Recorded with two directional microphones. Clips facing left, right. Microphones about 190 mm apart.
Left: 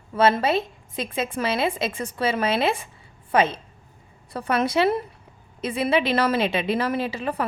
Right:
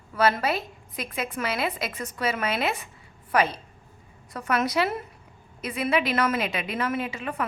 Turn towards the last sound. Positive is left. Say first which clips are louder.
# left 4 dB
turn(degrees=35)  # may be behind; listen again after turning